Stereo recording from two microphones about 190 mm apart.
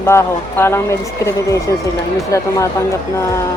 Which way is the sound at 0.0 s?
10° left (ahead or behind).